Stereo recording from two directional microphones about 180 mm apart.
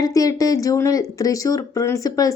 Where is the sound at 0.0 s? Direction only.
20° left (ahead or behind).